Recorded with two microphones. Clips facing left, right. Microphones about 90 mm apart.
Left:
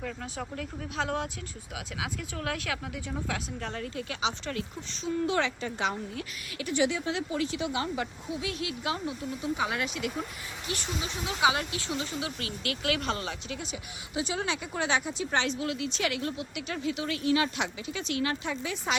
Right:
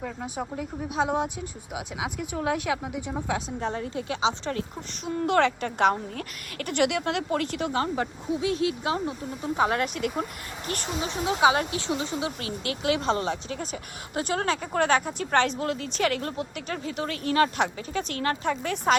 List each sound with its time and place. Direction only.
0.0 s speech: 15° right (ahead or behind)
5.2 s a woman's voice: 55° right (ahead or behind)
11.1 s speech: 35° right (ahead or behind)
14.2 s a woman's voice: 55° right (ahead or behind)